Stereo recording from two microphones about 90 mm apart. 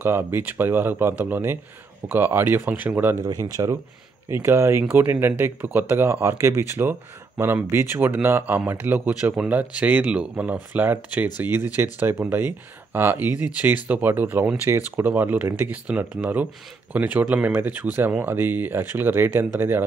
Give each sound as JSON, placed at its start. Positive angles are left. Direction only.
{"t": 0.0, "sound": "speech", "side_deg": -25}
{"t": 3.6, "sound": "speech", "side_deg": -45}
{"t": 4.3, "sound": "speech", "side_deg": -30}